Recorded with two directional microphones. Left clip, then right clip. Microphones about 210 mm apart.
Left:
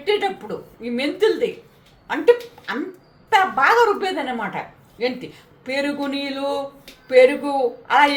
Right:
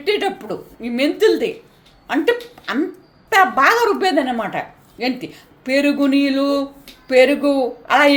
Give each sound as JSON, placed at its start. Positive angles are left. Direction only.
{"t": 0.0, "sound": "a woman's voice", "side_deg": -40}